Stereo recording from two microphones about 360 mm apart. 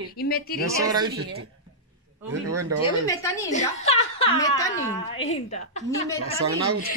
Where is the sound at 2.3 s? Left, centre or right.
Right.